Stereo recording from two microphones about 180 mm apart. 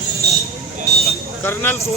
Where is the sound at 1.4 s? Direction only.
15° left (ahead or behind).